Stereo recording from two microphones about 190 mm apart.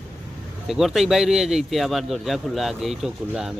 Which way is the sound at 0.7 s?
Centre (ahead or behind).